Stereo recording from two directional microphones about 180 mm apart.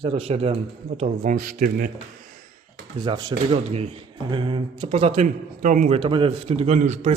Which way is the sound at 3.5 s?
35° right (ahead or behind).